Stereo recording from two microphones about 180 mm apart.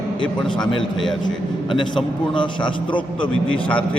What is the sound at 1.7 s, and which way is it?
A man's voice, 25° left (ahead or behind).